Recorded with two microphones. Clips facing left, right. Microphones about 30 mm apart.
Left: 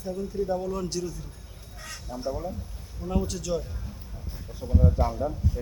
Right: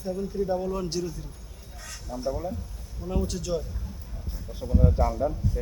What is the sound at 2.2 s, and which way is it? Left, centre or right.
Speech, centre.